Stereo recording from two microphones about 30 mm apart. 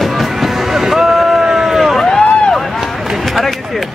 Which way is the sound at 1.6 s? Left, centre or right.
Centre.